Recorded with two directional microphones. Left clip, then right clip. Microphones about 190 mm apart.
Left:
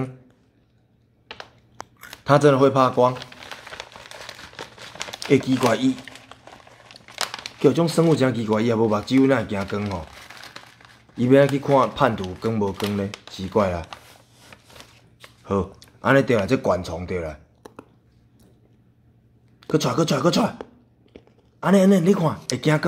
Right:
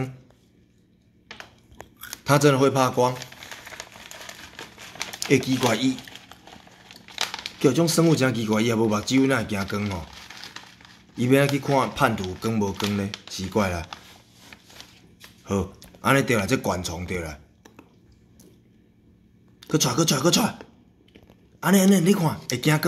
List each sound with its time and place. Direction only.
2.2 s speech: centre (ahead or behind)
5.3 s speech: centre (ahead or behind)
6.0 s crumpling: 40° left (ahead or behind)
7.5 s speech: centre (ahead or behind)
10.4 s crushing: 40° left (ahead or behind)
11.1 s speech: centre (ahead or behind)
14.5 s a sound: 40° left (ahead or behind)
15.5 s speech: centre (ahead or behind)
19.6 s speech: centre (ahead or behind)
21.5 s speech: centre (ahead or behind)